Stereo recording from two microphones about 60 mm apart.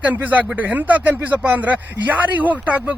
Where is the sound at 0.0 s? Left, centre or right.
Right.